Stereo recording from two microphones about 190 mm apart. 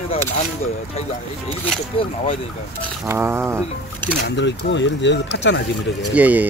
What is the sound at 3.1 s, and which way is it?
Speech, 10° right (ahead or behind).